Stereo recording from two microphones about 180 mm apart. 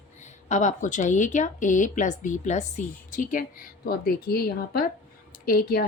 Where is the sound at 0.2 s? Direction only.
40° left (ahead or behind).